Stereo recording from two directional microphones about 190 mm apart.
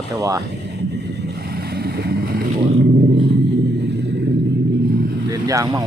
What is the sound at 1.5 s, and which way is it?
Boat, 55° right (ahead or behind).